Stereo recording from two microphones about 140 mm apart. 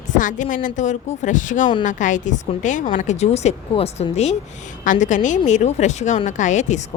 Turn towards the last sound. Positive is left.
turn(degrees=60)  # may be behind; listen again after turning